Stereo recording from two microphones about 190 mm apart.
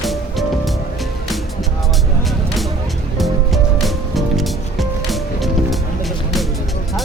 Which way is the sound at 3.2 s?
Centre (ahead or behind).